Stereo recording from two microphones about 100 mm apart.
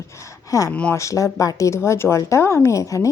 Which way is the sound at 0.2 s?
30° left (ahead or behind).